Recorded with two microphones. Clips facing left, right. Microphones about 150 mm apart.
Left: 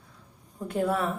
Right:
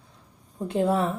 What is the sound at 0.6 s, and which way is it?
Speech, 25° right (ahead or behind).